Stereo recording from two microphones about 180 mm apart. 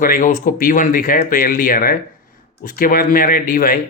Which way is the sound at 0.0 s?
50° left (ahead or behind).